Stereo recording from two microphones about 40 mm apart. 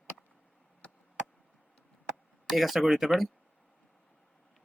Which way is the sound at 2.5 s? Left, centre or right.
Centre.